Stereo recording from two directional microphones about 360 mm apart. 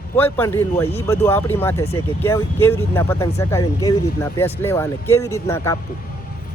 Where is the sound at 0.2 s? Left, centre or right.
Centre.